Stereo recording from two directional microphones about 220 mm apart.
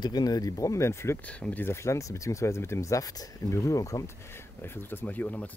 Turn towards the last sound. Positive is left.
turn(degrees=5)  # may be behind; listen again after turning